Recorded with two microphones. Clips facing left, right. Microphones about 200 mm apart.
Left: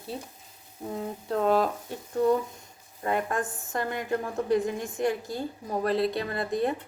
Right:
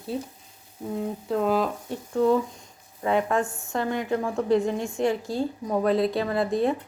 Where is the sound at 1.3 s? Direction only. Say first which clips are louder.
Even; centre (ahead or behind).